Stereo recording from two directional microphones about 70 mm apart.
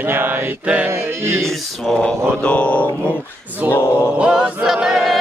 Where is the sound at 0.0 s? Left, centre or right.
Right.